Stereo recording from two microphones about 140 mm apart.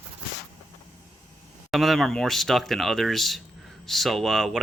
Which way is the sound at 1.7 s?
Centre (ahead or behind).